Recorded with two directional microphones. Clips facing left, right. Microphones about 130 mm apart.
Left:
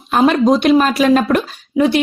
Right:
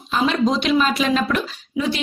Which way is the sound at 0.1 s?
55° left (ahead or behind).